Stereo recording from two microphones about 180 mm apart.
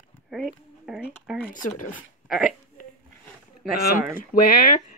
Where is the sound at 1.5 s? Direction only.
45° left (ahead or behind).